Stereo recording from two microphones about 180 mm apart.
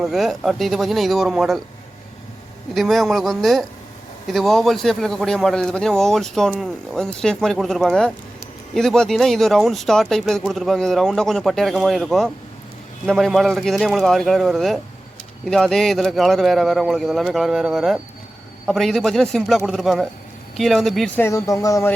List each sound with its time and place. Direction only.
0.0 s speech: centre (ahead or behind)
2.7 s speech: centre (ahead or behind)
21.2 s speech: 15° left (ahead or behind)